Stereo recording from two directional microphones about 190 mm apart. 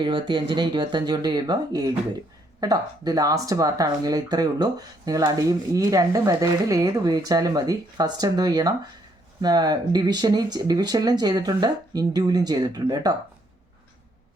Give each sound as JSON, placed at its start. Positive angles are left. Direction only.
{"t": 0.0, "sound": "speech", "side_deg": -25}